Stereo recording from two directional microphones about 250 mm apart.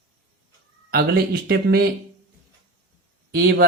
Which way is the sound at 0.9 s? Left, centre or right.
Right.